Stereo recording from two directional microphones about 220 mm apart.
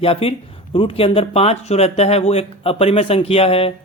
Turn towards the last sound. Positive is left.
turn(degrees=25)  # may be behind; listen again after turning